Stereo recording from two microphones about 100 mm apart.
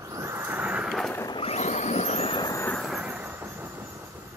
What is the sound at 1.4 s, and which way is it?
Vehicle, 90° left.